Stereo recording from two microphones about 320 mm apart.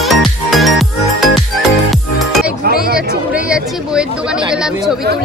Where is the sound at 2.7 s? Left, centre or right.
Right.